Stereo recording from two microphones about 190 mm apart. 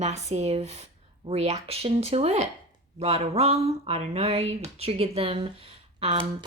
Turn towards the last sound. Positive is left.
turn(degrees=-30)  # may be behind; listen again after turning